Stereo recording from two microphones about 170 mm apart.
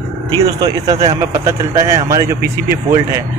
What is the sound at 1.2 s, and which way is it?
Speech, 15° right (ahead or behind).